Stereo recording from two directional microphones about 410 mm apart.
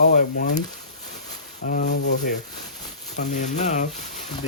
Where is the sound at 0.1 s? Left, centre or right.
Centre.